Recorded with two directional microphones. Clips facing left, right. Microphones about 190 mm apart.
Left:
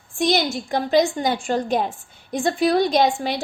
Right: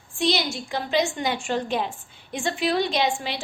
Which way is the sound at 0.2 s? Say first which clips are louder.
Left 4 dB; 50° left (ahead or behind).